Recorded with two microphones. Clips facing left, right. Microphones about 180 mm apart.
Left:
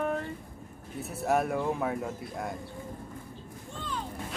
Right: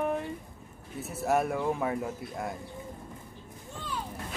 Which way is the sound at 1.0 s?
Centre (ahead or behind).